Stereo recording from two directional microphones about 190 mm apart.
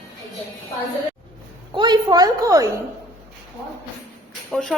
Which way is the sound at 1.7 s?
25° right (ahead or behind).